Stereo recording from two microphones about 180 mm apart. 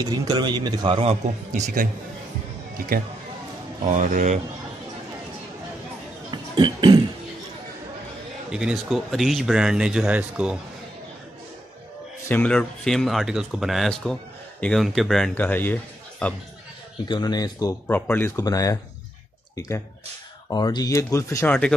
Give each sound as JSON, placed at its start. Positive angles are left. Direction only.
{"t": 0.0, "sound": "a man's voice", "side_deg": -25}
{"t": 1.5, "sound": "speech", "side_deg": -50}
{"t": 3.8, "sound": "speech", "side_deg": -45}
{"t": 6.3, "sound": "beatboxing", "side_deg": -25}
{"t": 8.5, "sound": "speech", "side_deg": -5}
{"t": 12.3, "sound": "speech", "side_deg": 5}
{"t": 17.1, "sound": "speech", "side_deg": 20}
{"t": 20.4, "sound": "speech", "side_deg": 20}